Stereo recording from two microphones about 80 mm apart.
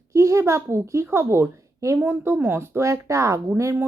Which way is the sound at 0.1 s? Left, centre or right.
Right.